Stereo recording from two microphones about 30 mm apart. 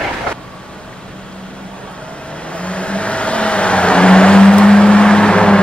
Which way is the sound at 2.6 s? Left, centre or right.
Left.